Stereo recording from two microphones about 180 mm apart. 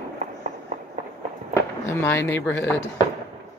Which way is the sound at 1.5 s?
15° left (ahead or behind).